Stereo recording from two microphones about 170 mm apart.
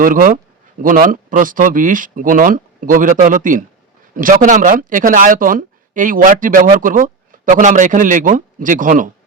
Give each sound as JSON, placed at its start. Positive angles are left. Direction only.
{"t": 0.0, "sound": "speech", "side_deg": -50}